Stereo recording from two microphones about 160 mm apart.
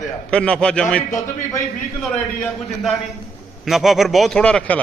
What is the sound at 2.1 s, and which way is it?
A man's voice, 5° left (ahead or behind).